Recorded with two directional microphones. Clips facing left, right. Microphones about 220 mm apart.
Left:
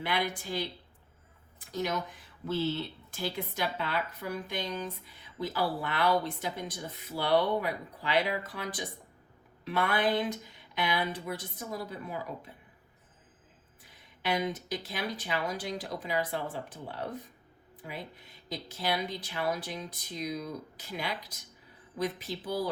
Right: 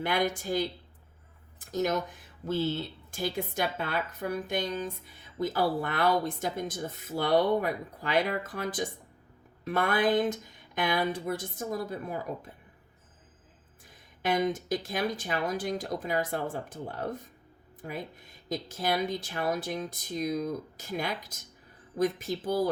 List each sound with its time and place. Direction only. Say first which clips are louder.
0.0 s speech: right 4 dB; 45° right (ahead or behind)
14.2 s speech: right 4 dB; 45° right (ahead or behind)